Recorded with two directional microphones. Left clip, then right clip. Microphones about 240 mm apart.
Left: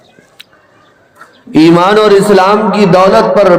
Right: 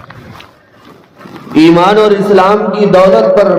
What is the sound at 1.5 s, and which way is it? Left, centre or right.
A man's voice, left.